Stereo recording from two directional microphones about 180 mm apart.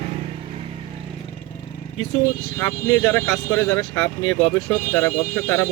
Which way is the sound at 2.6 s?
20° left (ahead or behind).